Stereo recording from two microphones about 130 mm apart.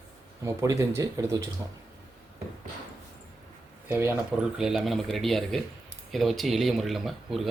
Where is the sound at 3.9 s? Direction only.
20° right (ahead or behind).